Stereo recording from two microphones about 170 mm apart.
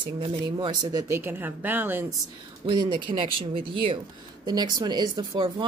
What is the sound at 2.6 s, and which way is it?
Speech, 30° right (ahead or behind).